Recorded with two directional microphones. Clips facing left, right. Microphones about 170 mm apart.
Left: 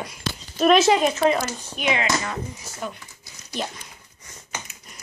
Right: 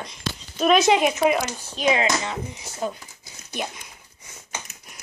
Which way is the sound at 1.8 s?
35° right (ahead or behind).